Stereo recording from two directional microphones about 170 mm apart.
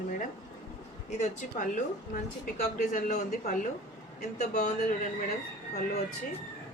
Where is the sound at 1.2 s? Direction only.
45° left (ahead or behind).